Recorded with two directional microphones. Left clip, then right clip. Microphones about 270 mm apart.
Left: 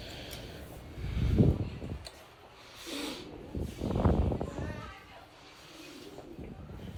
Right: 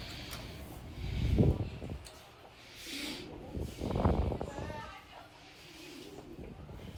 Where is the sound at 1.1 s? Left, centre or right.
Centre.